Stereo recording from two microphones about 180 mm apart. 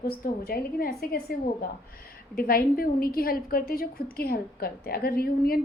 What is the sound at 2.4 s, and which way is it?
A woman's voice, 55° left (ahead or behind).